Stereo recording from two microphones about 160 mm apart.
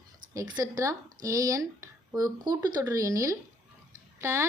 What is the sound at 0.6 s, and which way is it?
A woman's voice, 20° right (ahead or behind).